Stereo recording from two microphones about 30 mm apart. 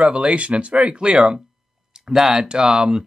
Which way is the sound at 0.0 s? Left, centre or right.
Right.